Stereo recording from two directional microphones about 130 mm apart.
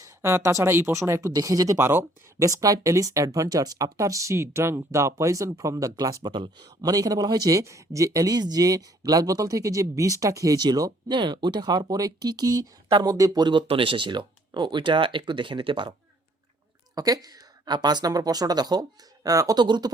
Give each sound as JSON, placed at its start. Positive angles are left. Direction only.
{"t": 0.0, "sound": "speech", "side_deg": -20}
{"t": 16.9, "sound": "speech", "side_deg": -30}